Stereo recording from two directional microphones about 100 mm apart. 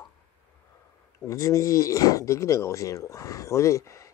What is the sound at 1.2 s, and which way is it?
Speech, 30° left (ahead or behind).